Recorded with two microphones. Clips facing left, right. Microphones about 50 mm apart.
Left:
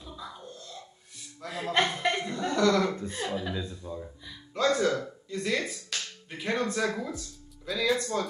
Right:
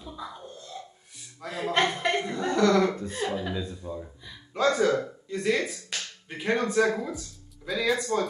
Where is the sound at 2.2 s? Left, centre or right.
Right.